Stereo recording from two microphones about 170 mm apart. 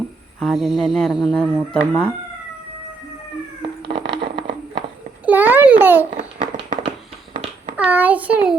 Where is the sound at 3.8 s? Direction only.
30° right (ahead or behind).